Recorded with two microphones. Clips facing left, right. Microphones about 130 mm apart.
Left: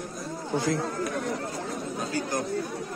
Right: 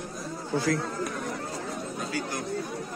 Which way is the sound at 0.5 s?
20° left (ahead or behind).